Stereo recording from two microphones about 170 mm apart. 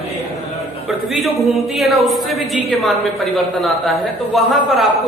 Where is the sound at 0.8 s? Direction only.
Centre (ahead or behind).